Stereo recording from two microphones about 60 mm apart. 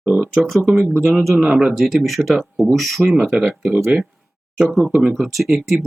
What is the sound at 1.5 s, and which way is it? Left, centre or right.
Speech, centre.